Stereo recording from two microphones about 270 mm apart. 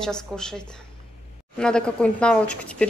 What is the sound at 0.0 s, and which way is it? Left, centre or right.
A woman's voice, centre.